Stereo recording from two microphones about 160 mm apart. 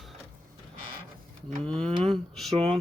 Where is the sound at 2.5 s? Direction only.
35° right (ahead or behind).